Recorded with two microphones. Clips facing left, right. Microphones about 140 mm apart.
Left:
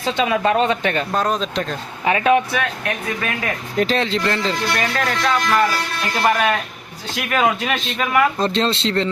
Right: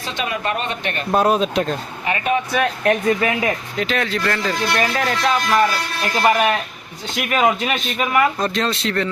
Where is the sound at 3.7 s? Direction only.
35° left (ahead or behind).